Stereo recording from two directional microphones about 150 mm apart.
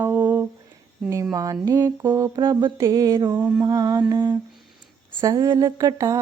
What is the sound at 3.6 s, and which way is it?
Mantra, 25° right (ahead or behind).